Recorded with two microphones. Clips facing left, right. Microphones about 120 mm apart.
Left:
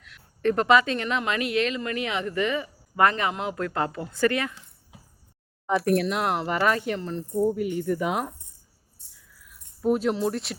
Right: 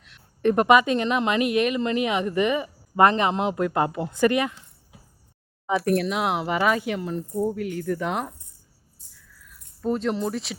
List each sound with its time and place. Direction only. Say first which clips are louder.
0.0 s speech: right 2 dB; 20° right (ahead or behind)
5.6 s speech: even; centre (ahead or behind)
7.3 s speech: left 3 dB; centre (ahead or behind)
9.8 s speech: left 2 dB; 5° left (ahead or behind)